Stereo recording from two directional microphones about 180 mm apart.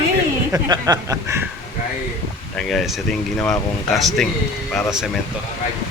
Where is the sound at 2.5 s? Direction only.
Centre (ahead or behind).